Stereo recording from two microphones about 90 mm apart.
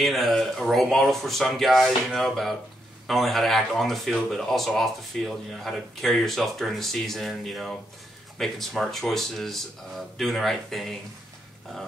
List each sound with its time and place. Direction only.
0.0 s speech: centre (ahead or behind)